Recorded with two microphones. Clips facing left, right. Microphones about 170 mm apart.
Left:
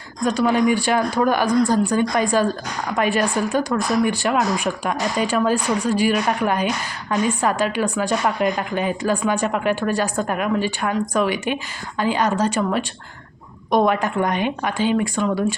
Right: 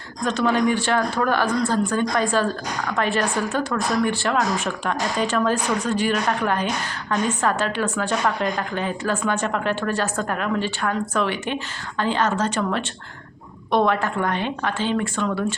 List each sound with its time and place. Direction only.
0.3 s a woman's voice: 10° left (ahead or behind)